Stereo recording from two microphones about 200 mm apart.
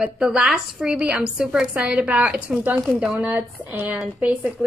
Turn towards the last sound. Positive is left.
turn(degrees=-5)  # may be behind; listen again after turning